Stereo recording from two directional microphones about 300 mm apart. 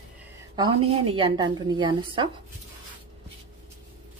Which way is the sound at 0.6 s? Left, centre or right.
Centre.